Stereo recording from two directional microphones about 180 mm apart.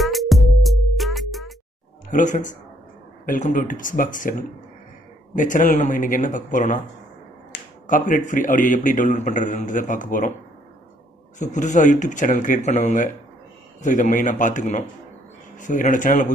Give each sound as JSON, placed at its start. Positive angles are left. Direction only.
{"t": 0.0, "sound": "music", "side_deg": 0}
{"t": 2.0, "sound": "a man's voice", "side_deg": 45}
{"t": 7.8, "sound": "a man's voice", "side_deg": 45}
{"t": 11.3, "sound": "a man's voice", "side_deg": 40}